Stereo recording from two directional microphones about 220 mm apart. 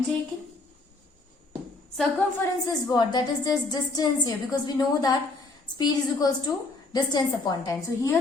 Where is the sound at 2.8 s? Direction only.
15° left (ahead or behind).